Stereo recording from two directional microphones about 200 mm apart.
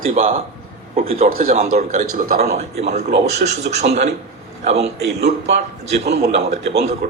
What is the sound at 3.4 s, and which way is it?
Speech, 45° right (ahead or behind).